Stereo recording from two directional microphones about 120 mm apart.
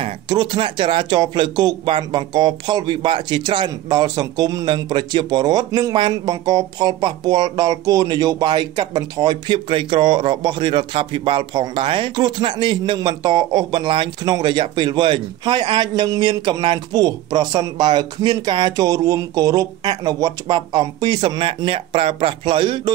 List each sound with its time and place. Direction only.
0.0 s a man's voice: 40° right (ahead or behind)
9.7 s a man's voice: 50° right (ahead or behind)
21.6 s speech: 50° right (ahead or behind)